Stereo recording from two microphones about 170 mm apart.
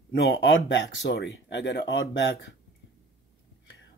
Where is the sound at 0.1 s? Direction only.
90° left.